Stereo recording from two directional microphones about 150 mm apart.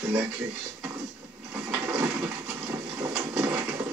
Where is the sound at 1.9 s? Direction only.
5° right (ahead or behind).